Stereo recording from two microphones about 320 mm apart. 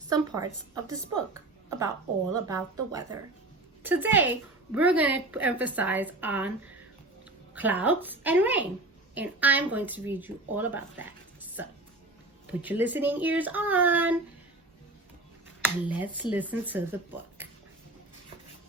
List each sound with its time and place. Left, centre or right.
0.1 s a woman's voice: centre
7.5 s a woman's voice: centre
15.9 s a woman's voice: centre